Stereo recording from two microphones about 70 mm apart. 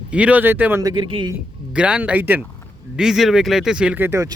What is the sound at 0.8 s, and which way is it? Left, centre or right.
Speech, right.